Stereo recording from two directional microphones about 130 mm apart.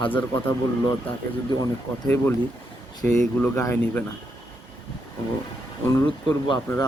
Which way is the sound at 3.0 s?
70° right (ahead or behind).